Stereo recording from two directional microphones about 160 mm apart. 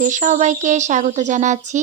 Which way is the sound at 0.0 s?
50° right (ahead or behind).